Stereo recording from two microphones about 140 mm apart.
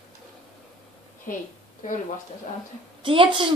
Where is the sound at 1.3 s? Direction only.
70° left (ahead or behind).